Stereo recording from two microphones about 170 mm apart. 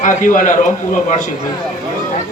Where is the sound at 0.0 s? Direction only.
50° left (ahead or behind).